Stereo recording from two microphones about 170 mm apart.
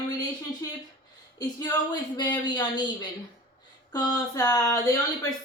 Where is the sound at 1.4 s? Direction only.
25° left (ahead or behind).